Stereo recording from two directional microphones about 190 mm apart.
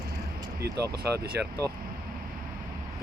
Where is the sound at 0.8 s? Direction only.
15° right (ahead or behind).